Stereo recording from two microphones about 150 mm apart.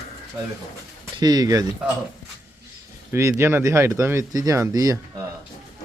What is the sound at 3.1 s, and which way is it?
Speech, 20° right (ahead or behind).